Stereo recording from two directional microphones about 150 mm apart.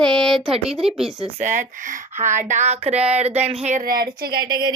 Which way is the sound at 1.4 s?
55° right (ahead or behind).